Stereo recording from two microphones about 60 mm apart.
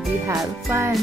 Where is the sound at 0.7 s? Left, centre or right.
Right.